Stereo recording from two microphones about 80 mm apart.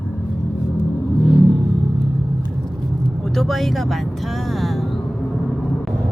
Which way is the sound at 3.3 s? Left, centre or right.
Centre.